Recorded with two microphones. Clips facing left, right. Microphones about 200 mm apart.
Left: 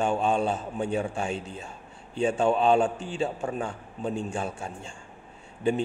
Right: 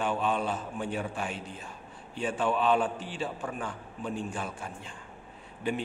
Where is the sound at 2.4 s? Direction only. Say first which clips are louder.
Left 4 dB; 25° left (ahead or behind).